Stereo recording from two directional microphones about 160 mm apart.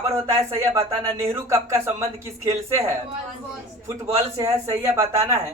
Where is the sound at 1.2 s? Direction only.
20° right (ahead or behind).